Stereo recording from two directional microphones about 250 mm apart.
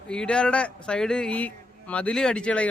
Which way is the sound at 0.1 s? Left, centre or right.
Centre.